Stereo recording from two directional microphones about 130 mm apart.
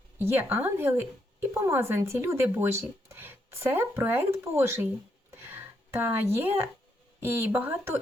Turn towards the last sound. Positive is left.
turn(degrees=-15)  # may be behind; listen again after turning